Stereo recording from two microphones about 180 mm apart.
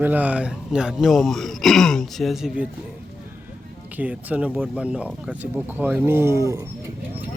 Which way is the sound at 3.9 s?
10° right (ahead or behind).